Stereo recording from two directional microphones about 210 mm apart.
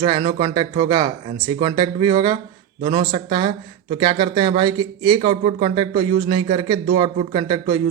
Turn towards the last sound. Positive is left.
turn(degrees=-25)  # may be behind; listen again after turning